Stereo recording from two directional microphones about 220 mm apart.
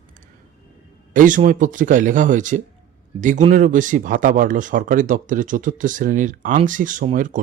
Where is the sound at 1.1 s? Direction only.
35° right (ahead or behind).